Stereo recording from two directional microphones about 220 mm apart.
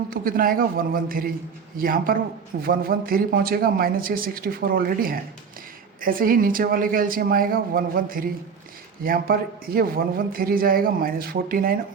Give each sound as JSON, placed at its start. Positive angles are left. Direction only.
{"t": 0.1, "sound": "a man's voice", "side_deg": -40}